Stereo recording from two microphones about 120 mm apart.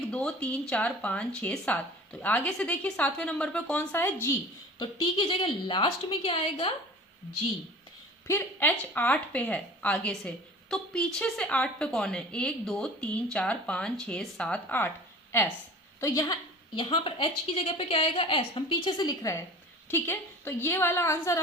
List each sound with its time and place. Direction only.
0.1 s a woman's voice: 10° left (ahead or behind)
4.8 s a woman's voice: 45° left (ahead or behind)
8.3 s a woman's voice: 15° left (ahead or behind)
16.7 s a woman's voice: 45° left (ahead or behind); by 19.4 s 30° left (ahead or behind)
19.9 s a woman's voice: 20° left (ahead or behind)